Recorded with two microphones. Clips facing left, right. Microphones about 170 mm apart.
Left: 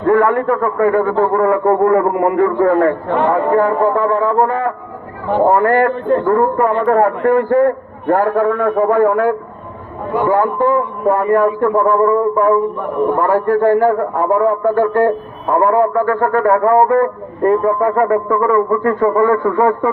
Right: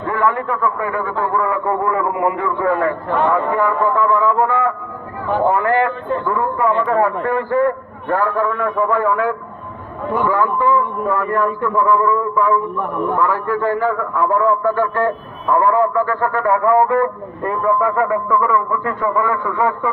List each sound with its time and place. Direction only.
0.0 s a man's voice: 50° left (ahead or behind)